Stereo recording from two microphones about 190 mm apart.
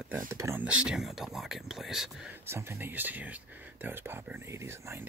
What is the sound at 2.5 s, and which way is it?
Speech, 15° right (ahead or behind).